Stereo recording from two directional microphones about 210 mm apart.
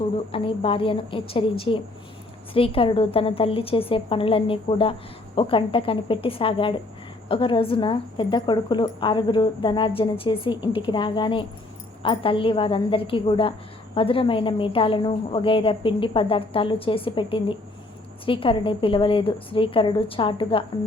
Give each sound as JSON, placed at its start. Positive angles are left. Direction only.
{"t": 0.3, "sound": "a woman's voice", "side_deg": 25}